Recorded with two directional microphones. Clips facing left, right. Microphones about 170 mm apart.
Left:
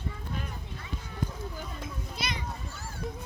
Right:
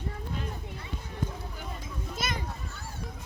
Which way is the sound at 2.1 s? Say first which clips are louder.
Right 3 dB; 45° right (ahead or behind).